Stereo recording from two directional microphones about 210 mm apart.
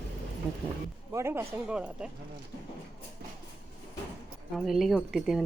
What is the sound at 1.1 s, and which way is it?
Speech, 15° right (ahead or behind).